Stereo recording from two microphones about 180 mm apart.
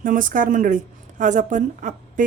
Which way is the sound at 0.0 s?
50° right (ahead or behind).